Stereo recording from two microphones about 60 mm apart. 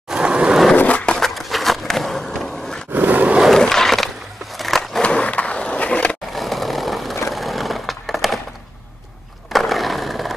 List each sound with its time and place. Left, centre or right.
0.1 s skateboard: centre
0.7 s skateboard: left
1.3 s skateboard: centre
2.9 s a sound: right
3.5 s skateboard: centre
5.0 s skateboard: centre
6.3 s vehicle: centre
7.2 s a sound: centre
9.5 s skateboard: centre